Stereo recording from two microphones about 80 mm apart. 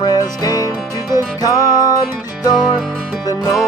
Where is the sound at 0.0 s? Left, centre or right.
Left.